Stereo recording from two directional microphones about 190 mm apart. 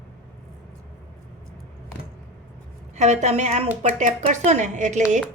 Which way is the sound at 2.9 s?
35° right (ahead or behind).